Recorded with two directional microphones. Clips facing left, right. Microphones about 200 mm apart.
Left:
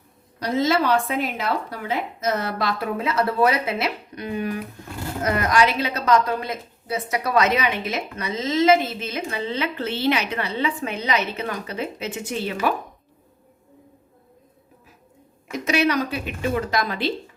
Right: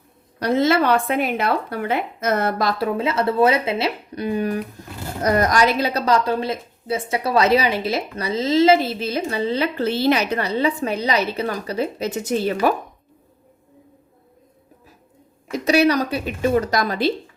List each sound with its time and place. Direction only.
0.3 s a woman's voice: 60° right (ahead or behind); by 12.7 s 40° right (ahead or behind)
15.5 s a woman's voice: 35° right (ahead or behind)